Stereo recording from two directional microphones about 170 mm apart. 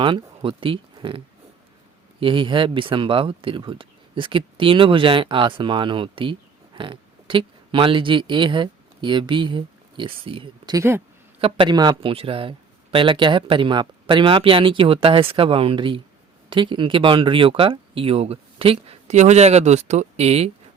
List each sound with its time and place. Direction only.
0.0 s speech: 30° right (ahead or behind)
2.2 s speech: 30° right (ahead or behind)
10.8 s speech: 15° right (ahead or behind)
11.3 s speech: 30° right (ahead or behind)